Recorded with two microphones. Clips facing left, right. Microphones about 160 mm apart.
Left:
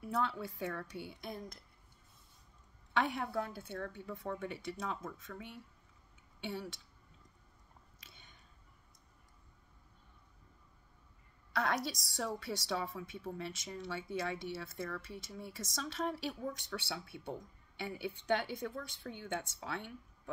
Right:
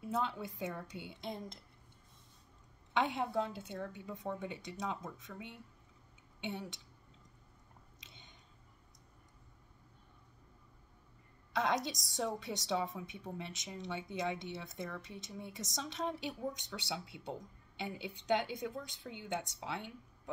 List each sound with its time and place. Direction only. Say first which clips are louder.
0.0 s a woman's voice: left 1 dB; 20° right (ahead or behind)
2.9 s a woman's voice: right 1 dB; 20° right (ahead or behind)
8.0 s a sound: right 2 dB; 20° right (ahead or behind)
11.5 s a woman's voice: right 1 dB; 20° right (ahead or behind)